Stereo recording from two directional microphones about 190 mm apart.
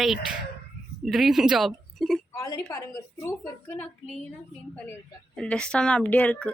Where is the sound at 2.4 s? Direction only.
15° left (ahead or behind).